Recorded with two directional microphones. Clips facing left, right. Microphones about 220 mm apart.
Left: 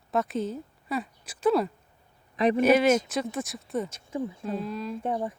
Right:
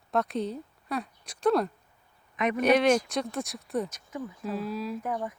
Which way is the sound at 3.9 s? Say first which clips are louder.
Left 5 dB; 30° left (ahead or behind).